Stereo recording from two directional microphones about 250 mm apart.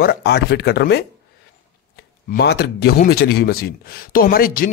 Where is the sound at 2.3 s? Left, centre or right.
Left.